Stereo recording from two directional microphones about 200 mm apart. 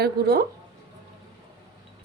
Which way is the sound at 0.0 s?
50° right (ahead or behind).